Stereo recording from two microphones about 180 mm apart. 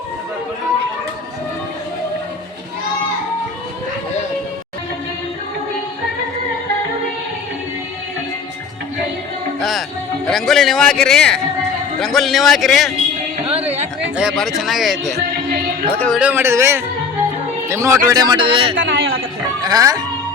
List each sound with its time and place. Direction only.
9.6 s music: centre (ahead or behind)
10.2 s speech: centre (ahead or behind)
13.5 s a sound: 35° right (ahead or behind)
14.2 s speech: 5° right (ahead or behind)
16.1 s a man's voice: 10° right (ahead or behind); by 18.7 s 30° right (ahead or behind)
18.8 s a sound: 90° right
19.6 s speech: 20° right (ahead or behind)